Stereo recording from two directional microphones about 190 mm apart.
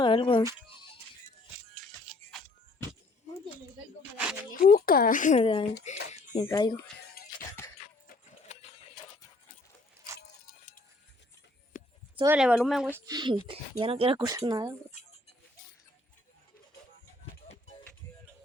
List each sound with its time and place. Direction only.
0.0 s speech: 25° left (ahead or behind)
2.1 s music: 35° right (ahead or behind)
4.6 s speech: 50° left (ahead or behind)
6.4 s speech: 20° left (ahead or behind)
8.0 s music: 45° left (ahead or behind)
10.2 s keys jangling: 45° left (ahead or behind)
11.7 s a sound: 45° left (ahead or behind)
12.2 s speech: 10° right (ahead or behind)
13.1 s speech: 25° right (ahead or behind)